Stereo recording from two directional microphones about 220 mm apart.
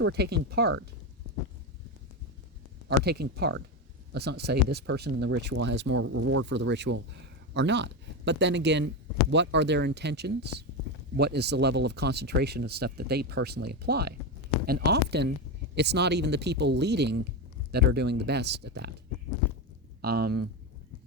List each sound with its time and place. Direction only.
0.0 s speech: 50° right (ahead or behind)
3.0 s speech: 45° right (ahead or behind); by 6.4 s 75° right (ahead or behind)
6.4 s speech: 55° right (ahead or behind)
20.0 s speech: 45° right (ahead or behind)